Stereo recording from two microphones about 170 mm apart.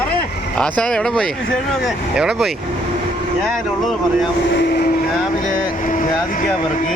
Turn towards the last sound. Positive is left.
turn(degrees=50)  # may be behind; listen again after turning